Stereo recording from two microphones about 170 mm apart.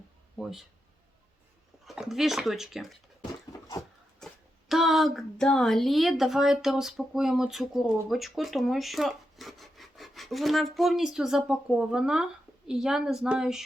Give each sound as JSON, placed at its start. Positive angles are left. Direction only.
{"t": 1.9, "sound": "a woman's voice", "side_deg": 0}
{"t": 3.5, "sound": "dog", "side_deg": 20}
{"t": 4.2, "sound": "a sound", "side_deg": 5}
{"t": 4.7, "sound": "a woman's voice", "side_deg": 0}